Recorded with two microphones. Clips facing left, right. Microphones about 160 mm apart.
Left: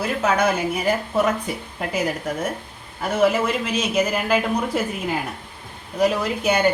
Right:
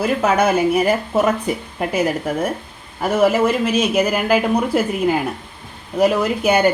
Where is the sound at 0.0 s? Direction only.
55° right (ahead or behind).